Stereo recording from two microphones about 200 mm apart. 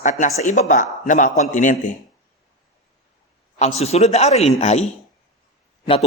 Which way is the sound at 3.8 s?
30° left (ahead or behind).